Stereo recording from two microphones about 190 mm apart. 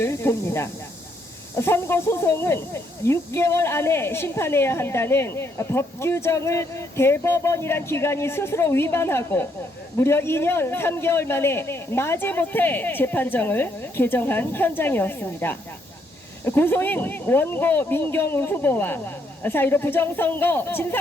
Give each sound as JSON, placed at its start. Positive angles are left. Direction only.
{"t": 0.0, "sound": "speech", "side_deg": 15}